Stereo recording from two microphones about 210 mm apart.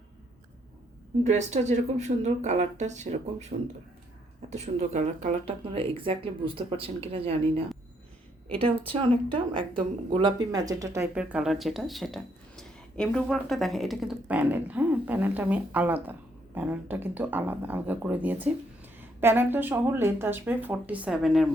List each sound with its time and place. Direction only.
1.2 s speech: 35° right (ahead or behind); by 21.5 s centre (ahead or behind)